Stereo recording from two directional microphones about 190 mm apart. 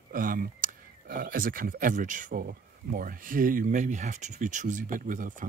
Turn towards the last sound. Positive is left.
turn(degrees=-45)  # may be behind; listen again after turning